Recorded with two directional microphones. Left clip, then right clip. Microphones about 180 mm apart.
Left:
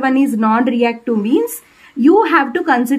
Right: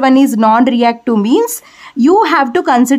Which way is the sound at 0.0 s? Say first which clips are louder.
Right 6 dB; 45° right (ahead or behind).